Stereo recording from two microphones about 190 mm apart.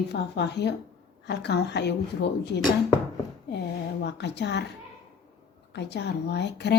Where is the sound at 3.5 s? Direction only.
60° left (ahead or behind).